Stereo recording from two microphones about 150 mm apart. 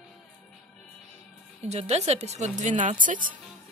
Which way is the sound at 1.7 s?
45° right (ahead or behind).